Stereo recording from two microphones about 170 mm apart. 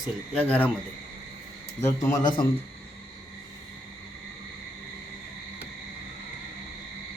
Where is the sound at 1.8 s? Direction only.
20° left (ahead or behind).